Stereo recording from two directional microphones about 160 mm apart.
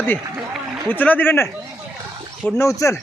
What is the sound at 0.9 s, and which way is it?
Speech, 10° left (ahead or behind).